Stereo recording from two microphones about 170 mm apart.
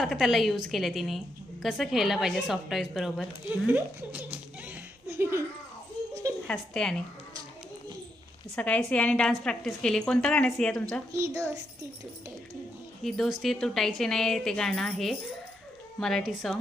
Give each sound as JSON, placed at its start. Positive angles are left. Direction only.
{"t": 0.0, "sound": "a woman's voice", "side_deg": 0}
{"t": 3.7, "sound": "laughter", "side_deg": -10}
{"t": 6.5, "sound": "a woman's voice", "side_deg": 5}
{"t": 8.5, "sound": "a woman's voice", "side_deg": 5}
{"t": 11.1, "sound": "a woman's voice", "side_deg": -15}
{"t": 13.0, "sound": "a woman's voice", "side_deg": 0}